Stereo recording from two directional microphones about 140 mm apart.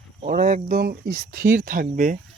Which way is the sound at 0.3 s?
90° right.